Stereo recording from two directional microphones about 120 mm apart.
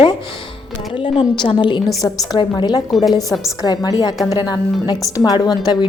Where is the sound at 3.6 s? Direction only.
30° left (ahead or behind).